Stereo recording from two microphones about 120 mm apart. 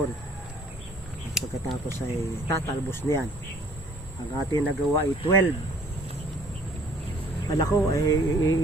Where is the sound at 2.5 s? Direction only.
20° left (ahead or behind).